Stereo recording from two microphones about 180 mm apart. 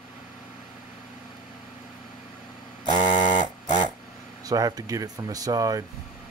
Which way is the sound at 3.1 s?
45° left (ahead or behind).